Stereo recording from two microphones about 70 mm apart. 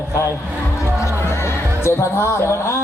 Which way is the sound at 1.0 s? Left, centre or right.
Left.